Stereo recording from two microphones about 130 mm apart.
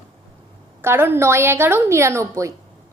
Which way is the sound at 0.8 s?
15° right (ahead or behind).